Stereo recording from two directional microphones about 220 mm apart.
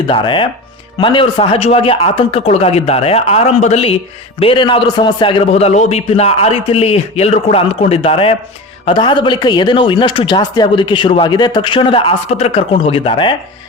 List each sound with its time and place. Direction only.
0.1 s a man's voice: 20° left (ahead or behind)